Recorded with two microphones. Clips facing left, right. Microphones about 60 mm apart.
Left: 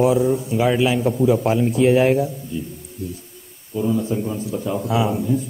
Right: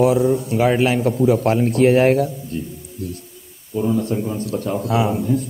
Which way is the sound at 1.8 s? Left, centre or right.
Right.